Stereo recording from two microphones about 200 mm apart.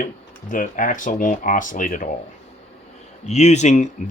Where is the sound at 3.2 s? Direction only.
35° left (ahead or behind).